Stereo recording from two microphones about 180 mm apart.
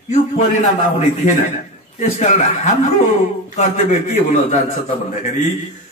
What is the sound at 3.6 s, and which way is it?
Speech, 35° left (ahead or behind).